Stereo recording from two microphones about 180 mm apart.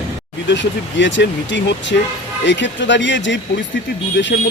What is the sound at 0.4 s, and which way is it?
Speech, 85° left.